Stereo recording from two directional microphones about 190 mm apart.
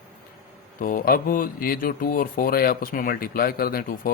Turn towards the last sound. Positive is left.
turn(degrees=50)  # may be behind; listen again after turning